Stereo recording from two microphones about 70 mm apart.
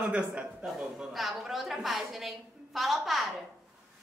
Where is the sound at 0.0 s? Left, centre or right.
Centre.